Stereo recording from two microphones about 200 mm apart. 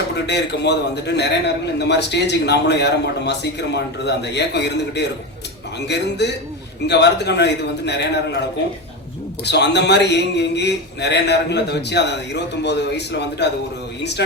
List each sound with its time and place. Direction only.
0.3 s a man's voice: 60° left (ahead or behind)
9.4 s a man's voice: 55° left (ahead or behind)